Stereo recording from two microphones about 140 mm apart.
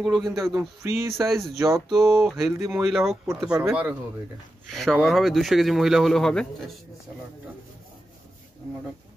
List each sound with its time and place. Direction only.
0.0 s speech: centre (ahead or behind)
0.6 s music: 20° right (ahead or behind)
1.2 s speech: centre (ahead or behind)
1.6 s a sound: 25° right (ahead or behind)
2.8 s speech: centre (ahead or behind)
3.6 s music: 10° right (ahead or behind)
4.6 s speech: centre (ahead or behind)